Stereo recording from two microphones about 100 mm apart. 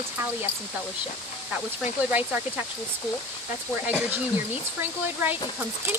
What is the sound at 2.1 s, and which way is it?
Speech, 15° right (ahead or behind).